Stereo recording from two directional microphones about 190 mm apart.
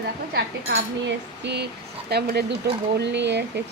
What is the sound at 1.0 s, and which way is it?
Speech, 65° right (ahead or behind).